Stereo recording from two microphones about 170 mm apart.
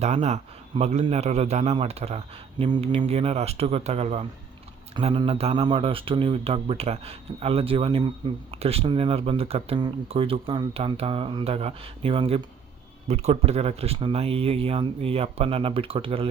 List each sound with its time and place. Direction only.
0.0 s speech: 40° right (ahead or behind)